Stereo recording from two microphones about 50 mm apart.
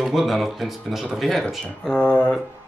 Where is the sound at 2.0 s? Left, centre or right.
Left.